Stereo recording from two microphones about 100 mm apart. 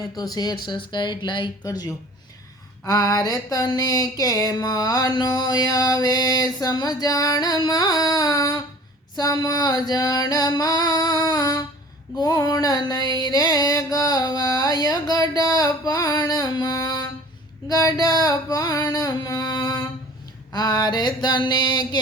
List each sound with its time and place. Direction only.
0.2 s mantra: 40° left (ahead or behind)
1.6 s a sound: 40° left (ahead or behind)
20.5 s mantra: 40° left (ahead or behind)